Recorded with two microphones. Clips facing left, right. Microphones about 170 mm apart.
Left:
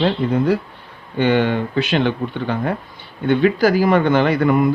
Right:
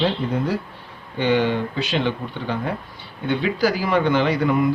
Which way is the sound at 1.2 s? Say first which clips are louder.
Left 3 dB; 55° left (ahead or behind).